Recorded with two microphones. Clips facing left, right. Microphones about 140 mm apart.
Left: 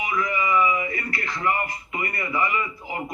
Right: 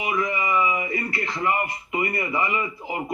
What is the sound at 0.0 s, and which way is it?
Speech, 20° right (ahead or behind).